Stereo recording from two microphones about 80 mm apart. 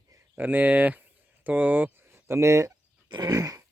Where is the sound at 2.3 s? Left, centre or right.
Right.